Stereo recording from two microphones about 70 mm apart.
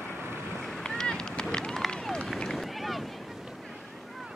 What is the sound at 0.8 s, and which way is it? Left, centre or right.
Run, centre.